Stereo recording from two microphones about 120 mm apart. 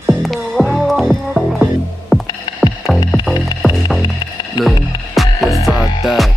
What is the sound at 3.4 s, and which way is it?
Music, centre (ahead or behind).